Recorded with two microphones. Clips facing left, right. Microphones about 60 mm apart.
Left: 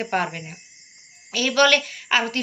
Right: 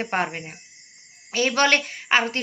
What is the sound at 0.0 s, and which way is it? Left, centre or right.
Speech, right.